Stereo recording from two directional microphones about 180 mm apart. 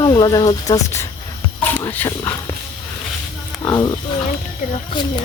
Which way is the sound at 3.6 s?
20° left (ahead or behind).